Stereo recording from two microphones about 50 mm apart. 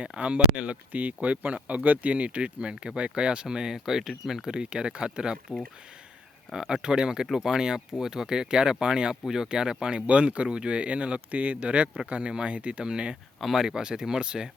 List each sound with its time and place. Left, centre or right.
0.0 s speech: right
13.4 s speech: centre
13.7 s speech: centre